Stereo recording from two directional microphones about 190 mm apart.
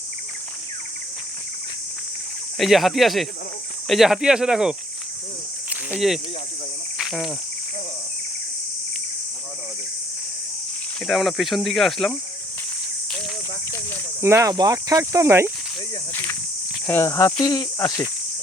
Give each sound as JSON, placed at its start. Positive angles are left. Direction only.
{"t": 2.6, "sound": "speech", "side_deg": 0}
{"t": 5.9, "sound": "speech", "side_deg": 0}
{"t": 7.0, "sound": "cricket", "side_deg": 0}
{"t": 11.0, "sound": "speech", "side_deg": 0}
{"t": 14.2, "sound": "speech", "side_deg": -15}
{"t": 16.8, "sound": "speech", "side_deg": 10}
{"t": 17.4, "sound": "cricket", "side_deg": 20}